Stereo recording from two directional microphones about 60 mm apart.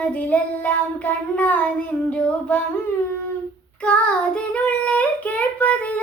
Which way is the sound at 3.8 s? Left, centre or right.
Centre.